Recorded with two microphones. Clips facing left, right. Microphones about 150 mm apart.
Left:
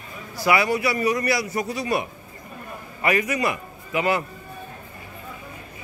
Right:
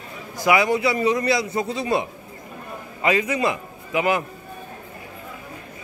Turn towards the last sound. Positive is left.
turn(degrees=-15)  # may be behind; listen again after turning